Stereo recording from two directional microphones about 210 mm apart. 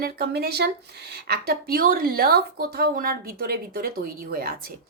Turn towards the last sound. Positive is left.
turn(degrees=-45)  # may be behind; listen again after turning